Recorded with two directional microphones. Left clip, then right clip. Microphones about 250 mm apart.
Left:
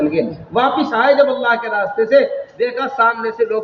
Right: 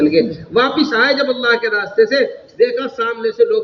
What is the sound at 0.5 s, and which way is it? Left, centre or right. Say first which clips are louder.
A man's voice: right 1 dB; centre.